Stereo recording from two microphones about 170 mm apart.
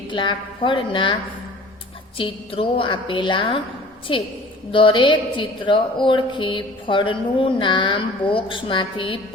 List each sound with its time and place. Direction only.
0.1 s a woman's voice: 30° left (ahead or behind)
2.1 s a woman's voice: 30° left (ahead or behind)